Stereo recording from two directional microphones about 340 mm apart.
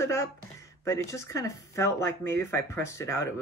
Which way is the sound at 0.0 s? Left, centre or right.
Centre.